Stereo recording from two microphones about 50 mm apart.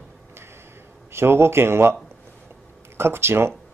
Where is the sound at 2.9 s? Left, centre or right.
Right.